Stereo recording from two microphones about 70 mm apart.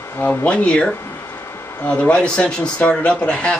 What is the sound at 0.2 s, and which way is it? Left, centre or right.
Speech, centre.